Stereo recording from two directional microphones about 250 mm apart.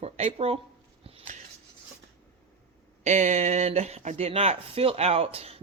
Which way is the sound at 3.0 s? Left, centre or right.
Right.